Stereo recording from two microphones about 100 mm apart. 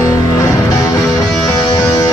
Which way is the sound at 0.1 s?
35° left (ahead or behind).